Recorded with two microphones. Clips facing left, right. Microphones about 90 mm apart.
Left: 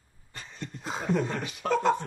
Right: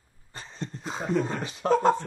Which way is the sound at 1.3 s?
30° right (ahead or behind).